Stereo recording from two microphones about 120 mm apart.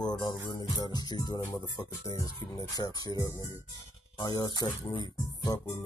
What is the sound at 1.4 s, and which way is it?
Speech, 20° left (ahead or behind).